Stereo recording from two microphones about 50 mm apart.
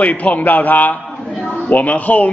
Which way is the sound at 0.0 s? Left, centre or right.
Left.